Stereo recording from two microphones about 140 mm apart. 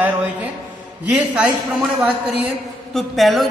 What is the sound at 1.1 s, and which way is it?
A woman's voice, 10° right (ahead or behind).